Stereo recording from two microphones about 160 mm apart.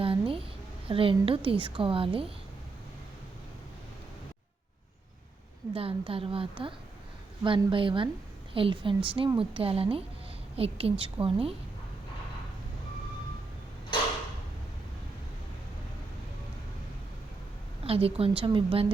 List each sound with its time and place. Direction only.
0.0 s a sound: 35° right (ahead or behind)
0.9 s a woman's voice: 35° right (ahead or behind)
5.7 s a woman's voice: 35° right (ahead or behind)
17.8 s a woman's voice: 35° right (ahead or behind)